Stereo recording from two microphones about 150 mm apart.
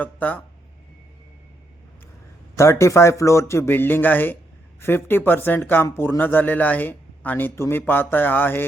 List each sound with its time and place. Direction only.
0.0 s speech: 10° left (ahead or behind)
2.6 s a man's voice: 20° left (ahead or behind)